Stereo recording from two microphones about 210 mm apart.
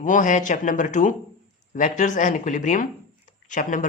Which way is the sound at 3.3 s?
35° left (ahead or behind).